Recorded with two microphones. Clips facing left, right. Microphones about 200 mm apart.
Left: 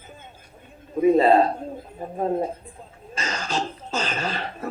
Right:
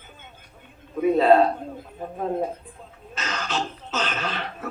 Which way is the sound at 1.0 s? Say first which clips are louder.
Left 1 dB; 35° left (ahead or behind).